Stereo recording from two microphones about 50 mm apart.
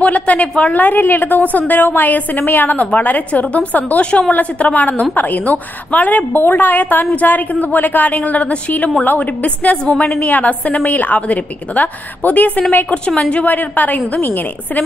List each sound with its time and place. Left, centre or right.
0.0 s a woman's voice: left